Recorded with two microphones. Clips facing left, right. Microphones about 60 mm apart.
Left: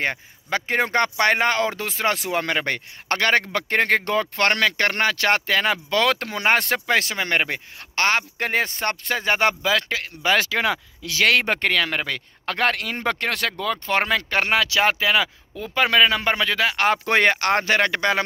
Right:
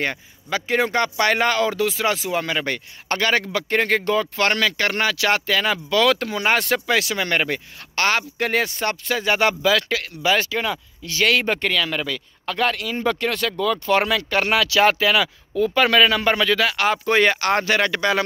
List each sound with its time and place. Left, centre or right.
0.5 s speech: left
7.2 s speech: left
8.6 s speech: left
9.6 s speech: left
10.3 s speech: left
11.2 s speech: left
13.6 s speech: left
16.7 s speech: left
17.3 s speech: left